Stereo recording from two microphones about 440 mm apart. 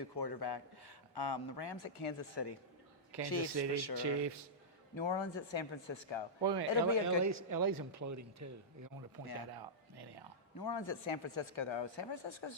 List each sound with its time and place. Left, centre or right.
0.0 s speech: left
3.9 s speech: right
4.9 s speech: left
6.4 s speech: right
9.5 s a sound: right
10.6 s speech: left